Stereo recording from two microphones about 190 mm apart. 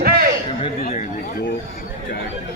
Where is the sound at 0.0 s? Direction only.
50° right (ahead or behind).